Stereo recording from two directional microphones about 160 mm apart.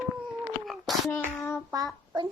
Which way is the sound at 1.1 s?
10° left (ahead or behind).